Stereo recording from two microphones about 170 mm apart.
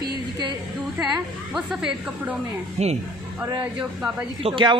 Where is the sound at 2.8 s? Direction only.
40° right (ahead or behind).